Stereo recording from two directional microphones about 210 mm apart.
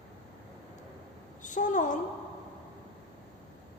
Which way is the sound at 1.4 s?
35° left (ahead or behind).